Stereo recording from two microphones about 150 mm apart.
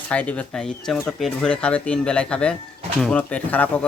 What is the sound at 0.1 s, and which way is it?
Speech, 10° left (ahead or behind).